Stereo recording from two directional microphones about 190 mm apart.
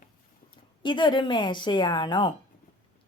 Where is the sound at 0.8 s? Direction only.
25° left (ahead or behind).